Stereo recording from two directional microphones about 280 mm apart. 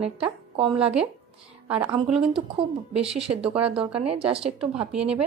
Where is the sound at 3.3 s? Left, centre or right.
Right.